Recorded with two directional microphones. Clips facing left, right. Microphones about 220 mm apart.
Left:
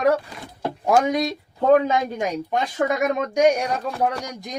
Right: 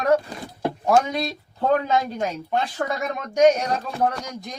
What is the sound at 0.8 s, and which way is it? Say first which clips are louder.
Speech: left 2 dB; 15° left (ahead or behind).